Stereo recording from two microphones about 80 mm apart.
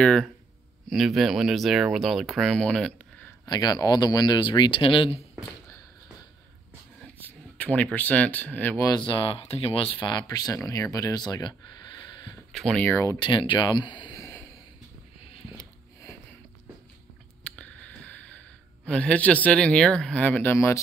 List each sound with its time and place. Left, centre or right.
0.0 s speech: centre
3.4 s speech: left
7.2 s speech: left
8.9 s speech: left
9.9 s speech: left
12.5 s speech: centre
13.2 s speech: left
17.4 s a sound: centre
18.9 s speech: centre
20.5 s speech: left